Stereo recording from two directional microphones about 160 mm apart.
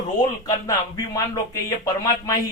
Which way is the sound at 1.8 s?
20° left (ahead or behind).